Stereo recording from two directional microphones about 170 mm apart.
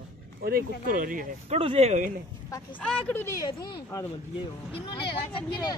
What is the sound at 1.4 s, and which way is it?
Speech, 35° right (ahead or behind).